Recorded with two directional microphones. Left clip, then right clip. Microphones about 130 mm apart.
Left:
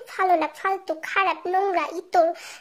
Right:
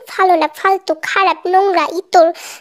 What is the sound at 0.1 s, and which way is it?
A child's voice, 50° right (ahead or behind).